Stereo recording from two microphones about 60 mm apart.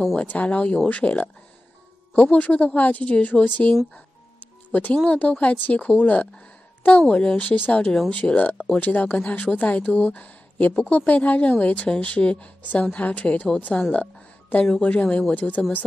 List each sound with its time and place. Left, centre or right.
0.1 s a woman's voice: left
3.9 s music: left
4.9 s a woman's voice: left
13.9 s music: left
15.0 s a woman's voice: centre